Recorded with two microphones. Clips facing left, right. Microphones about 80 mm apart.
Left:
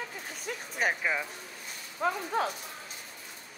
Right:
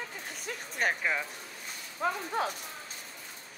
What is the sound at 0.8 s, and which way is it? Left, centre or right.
A woman's voice, centre.